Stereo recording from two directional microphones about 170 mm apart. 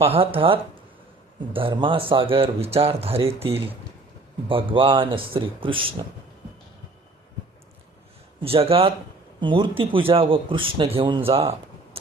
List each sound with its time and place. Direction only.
0.0 s speech: 35° right (ahead or behind)
8.4 s speech: 35° right (ahead or behind)